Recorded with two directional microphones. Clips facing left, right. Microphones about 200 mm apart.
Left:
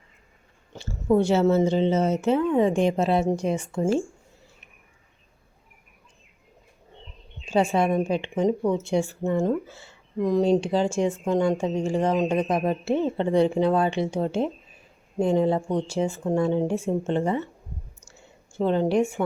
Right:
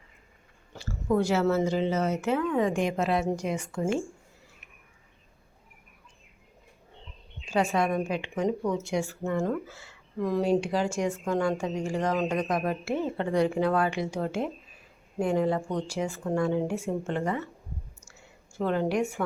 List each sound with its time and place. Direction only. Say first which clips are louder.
0.7 s speech: left 5 dB; 25° left (ahead or behind)
7.4 s speech: left 4 dB; 25° left (ahead or behind)
18.0 s clicking: left 3 dB; 25° left (ahead or behind)